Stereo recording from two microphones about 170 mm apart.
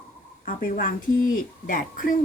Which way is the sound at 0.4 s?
55° left (ahead or behind).